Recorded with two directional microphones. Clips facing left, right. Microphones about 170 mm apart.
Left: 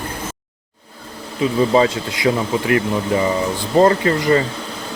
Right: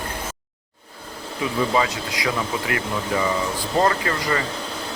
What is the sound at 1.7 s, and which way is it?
Speech, 30° left (ahead or behind).